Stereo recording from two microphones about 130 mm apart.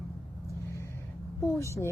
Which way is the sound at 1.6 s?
20° left (ahead or behind).